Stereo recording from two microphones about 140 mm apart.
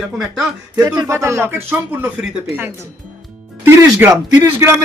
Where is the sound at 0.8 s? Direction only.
30° right (ahead or behind).